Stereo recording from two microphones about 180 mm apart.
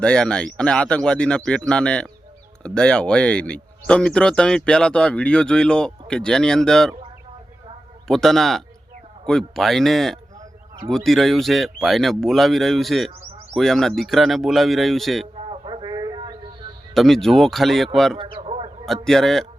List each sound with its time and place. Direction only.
0.0 s speech: 5° left (ahead or behind)
8.0 s speech: centre (ahead or behind)
15.4 s a sound: 30° right (ahead or behind)
16.9 s speech: centre (ahead or behind)
18.2 s a sound: 30° right (ahead or behind)
19.0 s speech: centre (ahead or behind)